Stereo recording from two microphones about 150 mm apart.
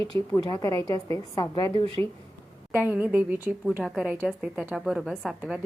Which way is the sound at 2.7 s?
10° right (ahead or behind).